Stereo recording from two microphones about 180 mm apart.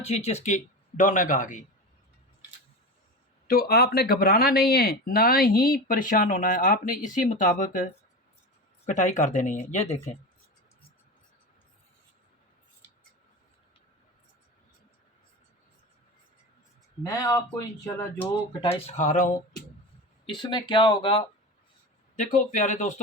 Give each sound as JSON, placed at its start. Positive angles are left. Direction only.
{"t": 0.3, "sound": "speech", "side_deg": 40}
{"t": 3.4, "sound": "speech", "side_deg": 55}
{"t": 8.9, "sound": "speech", "side_deg": 40}
{"t": 17.0, "sound": "speech", "side_deg": 20}
{"t": 18.6, "sound": "speech", "side_deg": 40}
{"t": 20.3, "sound": "speech", "side_deg": 25}
{"t": 22.1, "sound": "speech", "side_deg": 45}